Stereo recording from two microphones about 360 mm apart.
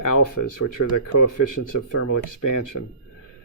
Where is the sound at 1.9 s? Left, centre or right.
Left.